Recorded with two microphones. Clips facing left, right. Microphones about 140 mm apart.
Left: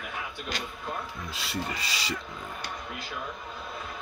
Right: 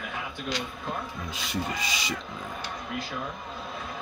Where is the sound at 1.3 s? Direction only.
15° right (ahead or behind).